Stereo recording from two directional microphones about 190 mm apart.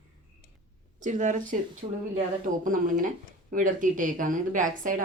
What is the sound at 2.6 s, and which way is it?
A woman's voice, 45° right (ahead or behind).